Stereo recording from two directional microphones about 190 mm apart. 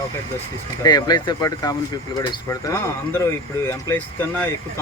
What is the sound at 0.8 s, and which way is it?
Speech, 20° left (ahead or behind).